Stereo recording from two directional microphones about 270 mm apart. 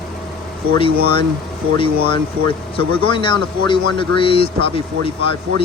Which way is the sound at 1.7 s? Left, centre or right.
Centre.